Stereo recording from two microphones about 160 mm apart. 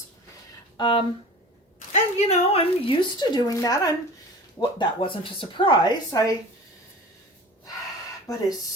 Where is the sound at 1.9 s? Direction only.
45° left (ahead or behind); by 6.3 s 20° left (ahead or behind).